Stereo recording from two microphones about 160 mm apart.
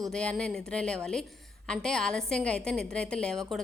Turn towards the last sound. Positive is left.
turn(degrees=5)  # may be behind; listen again after turning